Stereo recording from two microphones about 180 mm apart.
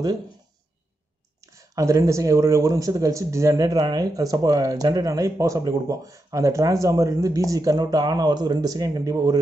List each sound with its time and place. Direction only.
1.4 s speech: 15° right (ahead or behind)